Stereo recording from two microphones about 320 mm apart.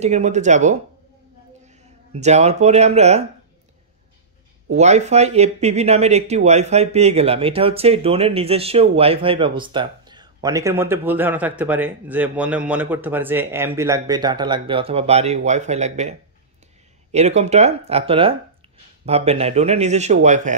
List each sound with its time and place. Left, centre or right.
0.0 s speech: right
2.1 s speech: right
4.6 s speech: right